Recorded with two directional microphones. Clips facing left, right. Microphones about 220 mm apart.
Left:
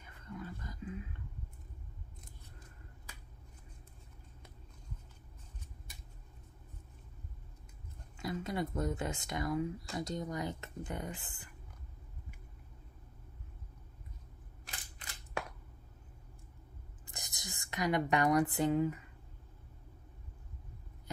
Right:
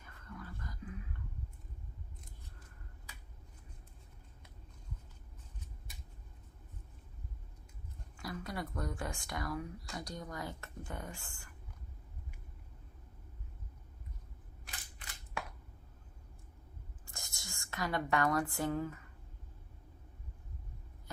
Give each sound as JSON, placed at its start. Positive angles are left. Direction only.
{"t": 0.0, "sound": "wild animals", "side_deg": 20}
{"t": 8.2, "sound": "speech", "side_deg": 20}
{"t": 17.0, "sound": "a sound", "side_deg": 20}